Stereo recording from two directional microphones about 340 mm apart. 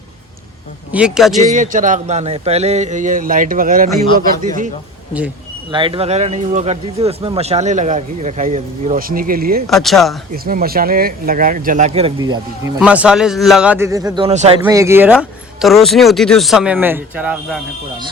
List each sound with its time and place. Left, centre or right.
0.9 s speech: centre
1.4 s speech: right
5.7 s speech: centre
9.6 s speech: centre
10.4 s speech: right; by 17.6 s centre